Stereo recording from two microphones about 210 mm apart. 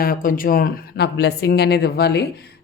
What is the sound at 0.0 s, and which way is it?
Speech, 40° left (ahead or behind).